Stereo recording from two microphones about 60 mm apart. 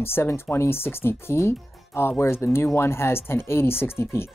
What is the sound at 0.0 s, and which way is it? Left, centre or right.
Speech, left.